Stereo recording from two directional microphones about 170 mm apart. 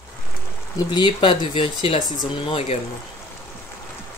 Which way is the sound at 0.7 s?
25° left (ahead or behind).